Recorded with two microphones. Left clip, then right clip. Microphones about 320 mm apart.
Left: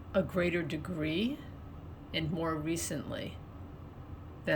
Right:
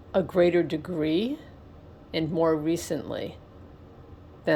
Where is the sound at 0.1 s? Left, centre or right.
Centre.